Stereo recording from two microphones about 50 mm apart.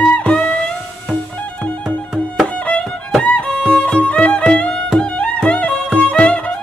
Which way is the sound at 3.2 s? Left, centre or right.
Left.